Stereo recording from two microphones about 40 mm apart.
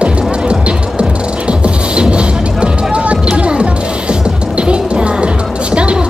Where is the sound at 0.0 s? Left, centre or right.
Right.